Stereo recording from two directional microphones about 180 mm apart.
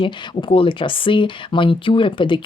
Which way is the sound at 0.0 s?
30° left (ahead or behind).